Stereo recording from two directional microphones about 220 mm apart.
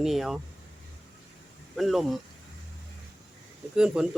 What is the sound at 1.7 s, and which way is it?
Speech, centre (ahead or behind).